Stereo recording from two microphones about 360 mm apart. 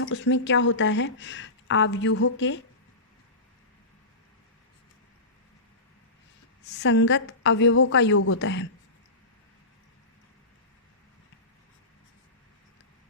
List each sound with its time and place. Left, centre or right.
0.0 s speech: left
6.8 s speech: left